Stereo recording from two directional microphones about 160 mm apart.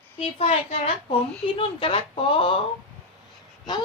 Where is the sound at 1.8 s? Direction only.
35° left (ahead or behind).